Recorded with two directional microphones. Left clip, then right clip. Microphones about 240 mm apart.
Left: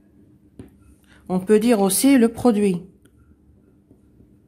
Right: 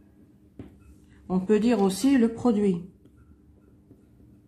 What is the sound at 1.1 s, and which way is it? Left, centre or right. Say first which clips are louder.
A woman's voice: left 6 dB; left.